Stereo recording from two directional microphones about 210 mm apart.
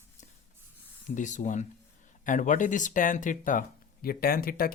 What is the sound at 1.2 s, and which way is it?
Speech, 35° left (ahead or behind).